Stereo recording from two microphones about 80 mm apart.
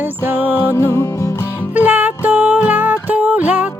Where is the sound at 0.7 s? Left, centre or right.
Left.